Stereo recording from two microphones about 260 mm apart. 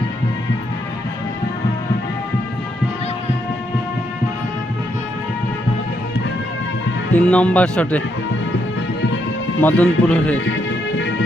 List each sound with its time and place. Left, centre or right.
7.1 s speech: centre
9.6 s speech: centre
10.4 s music: left